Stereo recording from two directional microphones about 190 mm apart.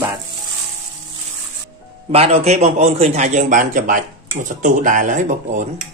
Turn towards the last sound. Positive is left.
turn(degrees=-45)  # may be behind; listen again after turning